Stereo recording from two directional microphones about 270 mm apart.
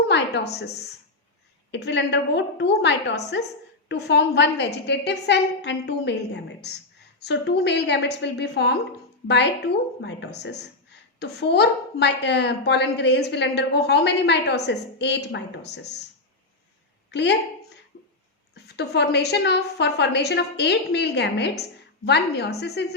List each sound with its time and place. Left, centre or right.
0.1 s a woman's voice: left
17.1 s a woman's voice: left
18.5 s a woman's voice: left